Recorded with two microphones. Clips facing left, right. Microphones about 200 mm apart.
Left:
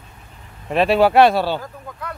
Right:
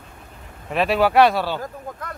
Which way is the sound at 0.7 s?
30° left (ahead or behind).